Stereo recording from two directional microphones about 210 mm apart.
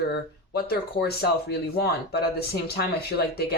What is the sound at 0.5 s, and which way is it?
Speech, 45° left (ahead or behind).